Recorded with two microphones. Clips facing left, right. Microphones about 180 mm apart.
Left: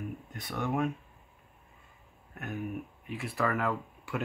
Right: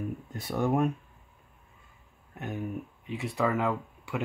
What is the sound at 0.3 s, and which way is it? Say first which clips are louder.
Speech: right 6 dB; 30° right (ahead or behind).